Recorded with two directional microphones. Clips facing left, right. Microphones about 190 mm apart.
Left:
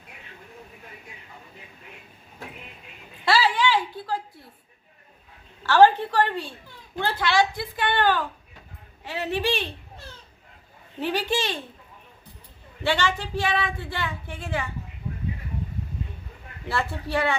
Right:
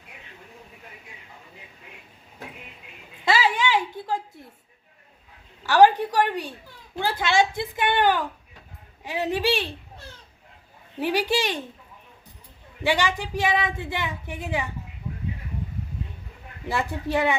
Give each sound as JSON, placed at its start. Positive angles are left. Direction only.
{"t": 3.2, "sound": "a sound", "side_deg": -20}
{"t": 5.6, "sound": "speech", "side_deg": -15}
{"t": 7.2, "sound": "a woman's voice", "side_deg": -20}
{"t": 11.0, "sound": "speech", "side_deg": -15}
{"t": 12.8, "sound": "speech", "side_deg": -15}
{"t": 16.6, "sound": "speech", "side_deg": -15}